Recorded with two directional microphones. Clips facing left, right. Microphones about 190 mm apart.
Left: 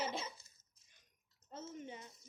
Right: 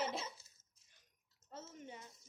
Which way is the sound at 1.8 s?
20° left (ahead or behind).